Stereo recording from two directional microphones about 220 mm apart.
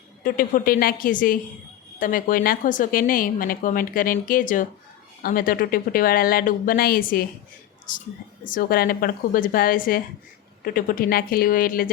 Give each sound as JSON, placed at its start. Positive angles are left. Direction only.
{"t": 0.2, "sound": "a woman's voice", "side_deg": 40}